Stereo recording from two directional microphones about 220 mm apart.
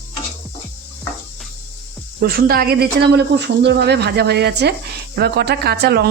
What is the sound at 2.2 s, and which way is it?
Speech, 45° right (ahead or behind).